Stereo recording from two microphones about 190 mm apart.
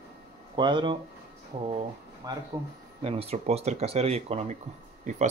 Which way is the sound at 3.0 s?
30° right (ahead or behind).